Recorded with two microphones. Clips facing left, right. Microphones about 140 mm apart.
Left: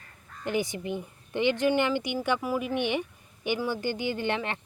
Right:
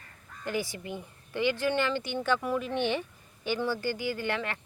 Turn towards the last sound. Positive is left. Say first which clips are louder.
# left 2 dB
turn(degrees=20)  # may be behind; listen again after turning